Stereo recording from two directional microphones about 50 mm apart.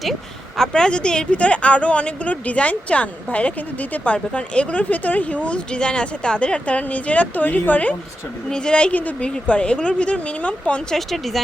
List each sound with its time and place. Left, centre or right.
0.0 s a woman's voice: centre; by 7.9 s left
8.4 s a woman's voice: centre
10.9 s speech: centre